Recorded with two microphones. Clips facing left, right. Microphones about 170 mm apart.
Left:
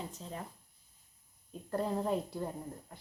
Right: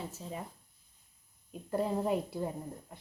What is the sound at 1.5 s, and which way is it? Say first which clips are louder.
Speech: right 2 dB; 10° right (ahead or behind).